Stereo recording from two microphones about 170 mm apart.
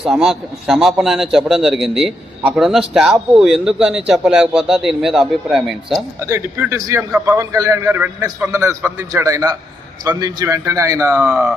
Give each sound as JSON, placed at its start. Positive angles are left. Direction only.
{"t": 0.0, "sound": "a man's voice", "side_deg": -5}
{"t": 6.1, "sound": "a man's voice", "side_deg": -15}